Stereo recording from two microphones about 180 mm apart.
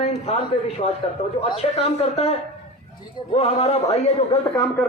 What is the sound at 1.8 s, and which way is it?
A man's voice, 35° left (ahead or behind).